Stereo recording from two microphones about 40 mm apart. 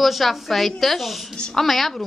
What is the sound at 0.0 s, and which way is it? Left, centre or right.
A woman's voice, centre.